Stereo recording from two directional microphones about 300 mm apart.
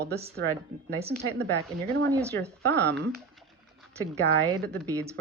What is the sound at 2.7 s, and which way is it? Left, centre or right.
Speech, right.